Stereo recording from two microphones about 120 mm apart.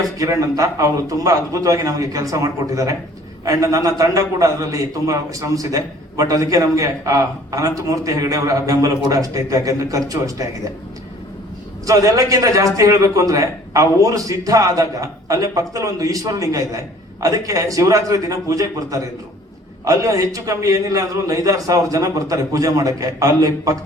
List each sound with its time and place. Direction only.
0.2 s a man's voice: 30° right (ahead or behind)
11.9 s a man's voice: 30° right (ahead or behind)